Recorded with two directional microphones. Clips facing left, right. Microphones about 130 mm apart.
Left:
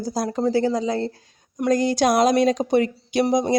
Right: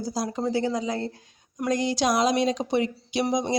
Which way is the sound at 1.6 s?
45° left (ahead or behind).